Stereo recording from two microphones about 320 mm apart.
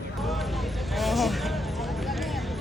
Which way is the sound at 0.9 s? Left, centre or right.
Centre.